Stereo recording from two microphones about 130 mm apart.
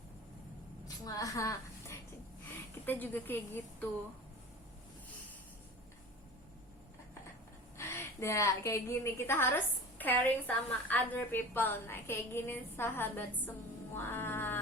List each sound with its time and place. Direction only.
1.0 s a woman's voice: 25° left (ahead or behind)
2.8 s a woman's voice: 15° left (ahead or behind)
7.8 s a woman's voice: 20° left (ahead or behind)
13.9 s music: 15° left (ahead or behind)